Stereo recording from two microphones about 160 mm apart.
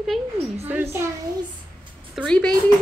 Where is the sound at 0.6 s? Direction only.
15° right (ahead or behind).